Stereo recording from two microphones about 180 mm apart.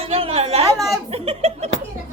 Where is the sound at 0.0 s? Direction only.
35° right (ahead or behind).